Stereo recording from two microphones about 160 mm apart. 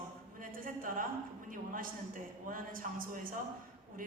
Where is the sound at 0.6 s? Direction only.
60° right (ahead or behind).